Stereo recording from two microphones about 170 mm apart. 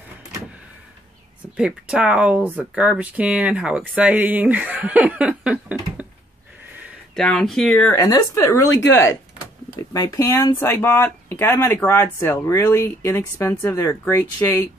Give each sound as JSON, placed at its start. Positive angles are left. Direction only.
{"t": 1.6, "sound": "speech", "side_deg": -5}
{"t": 7.2, "sound": "speech", "side_deg": 5}
{"t": 8.0, "sound": "speech", "side_deg": 20}